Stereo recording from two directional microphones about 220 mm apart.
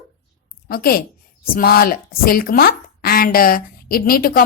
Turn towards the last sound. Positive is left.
turn(degrees=40)  # may be behind; listen again after turning